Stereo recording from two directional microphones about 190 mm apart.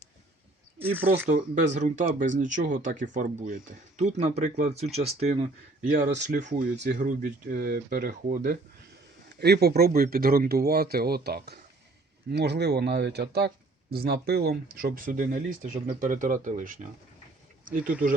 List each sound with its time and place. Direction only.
1.3 s speech: 40° right (ahead or behind)